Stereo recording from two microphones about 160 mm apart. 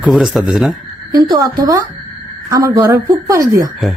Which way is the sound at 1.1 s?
25° right (ahead or behind).